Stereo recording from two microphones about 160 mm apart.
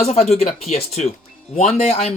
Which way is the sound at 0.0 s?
40° left (ahead or behind).